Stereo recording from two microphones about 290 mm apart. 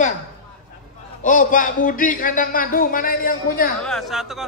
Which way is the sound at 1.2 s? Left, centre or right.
Left.